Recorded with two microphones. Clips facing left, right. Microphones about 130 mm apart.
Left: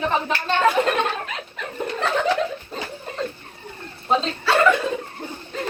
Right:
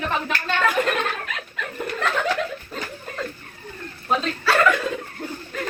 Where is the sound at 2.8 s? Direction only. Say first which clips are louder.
Left 3 dB; 30° left (ahead or behind).